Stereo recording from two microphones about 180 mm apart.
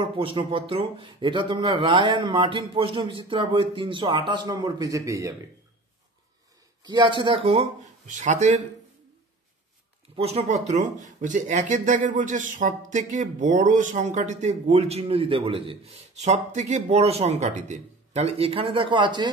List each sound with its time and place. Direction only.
0.0 s speech: 30° right (ahead or behind)
6.8 s speech: 25° right (ahead or behind)
8.1 s speech: 40° right (ahead or behind)
10.1 s speech: 35° right (ahead or behind)